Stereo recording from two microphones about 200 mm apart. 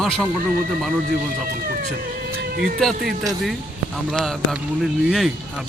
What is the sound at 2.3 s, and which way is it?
Music, 55° right (ahead or behind).